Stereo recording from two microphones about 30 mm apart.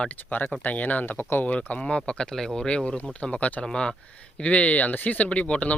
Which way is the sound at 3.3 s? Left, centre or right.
Left.